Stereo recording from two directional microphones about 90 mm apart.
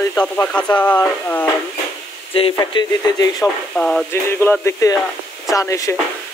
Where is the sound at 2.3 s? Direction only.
90° left.